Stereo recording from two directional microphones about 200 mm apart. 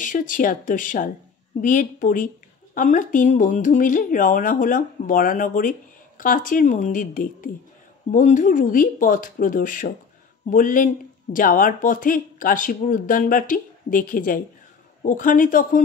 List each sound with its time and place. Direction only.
0.0 s speech: 40° left (ahead or behind)